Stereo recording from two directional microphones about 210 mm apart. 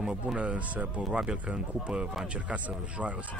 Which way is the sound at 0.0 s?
5° right (ahead or behind).